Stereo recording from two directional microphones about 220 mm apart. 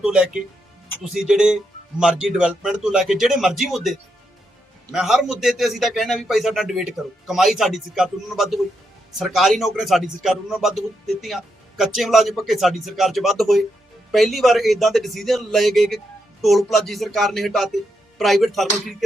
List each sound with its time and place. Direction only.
0.0 s a man's voice: 5° right (ahead or behind)